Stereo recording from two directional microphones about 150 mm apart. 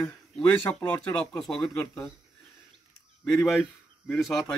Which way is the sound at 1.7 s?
20° left (ahead or behind).